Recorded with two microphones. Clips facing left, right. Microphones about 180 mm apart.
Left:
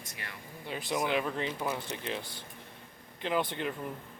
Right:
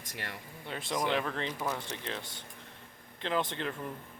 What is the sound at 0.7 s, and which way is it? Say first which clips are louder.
Speech: left 1 dB; 5° left (ahead or behind).